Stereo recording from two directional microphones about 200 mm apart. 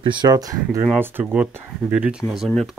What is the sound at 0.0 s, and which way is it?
Speech, 25° right (ahead or behind).